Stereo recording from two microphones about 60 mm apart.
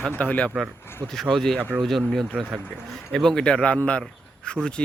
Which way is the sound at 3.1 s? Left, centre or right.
Centre.